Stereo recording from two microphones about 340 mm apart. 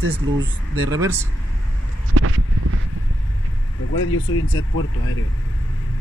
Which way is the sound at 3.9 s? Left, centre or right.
Left.